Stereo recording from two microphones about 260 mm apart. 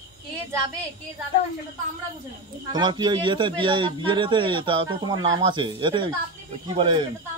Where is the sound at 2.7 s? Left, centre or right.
Centre.